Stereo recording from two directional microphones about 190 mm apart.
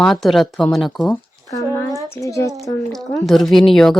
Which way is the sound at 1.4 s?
15° left (ahead or behind).